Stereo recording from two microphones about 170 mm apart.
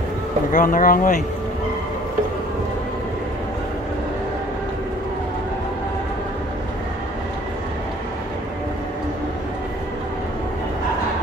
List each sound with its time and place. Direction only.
0.5 s speech: 50° left (ahead or behind)